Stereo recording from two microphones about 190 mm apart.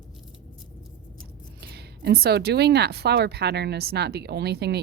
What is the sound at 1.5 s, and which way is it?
Speech, 60° right (ahead or behind).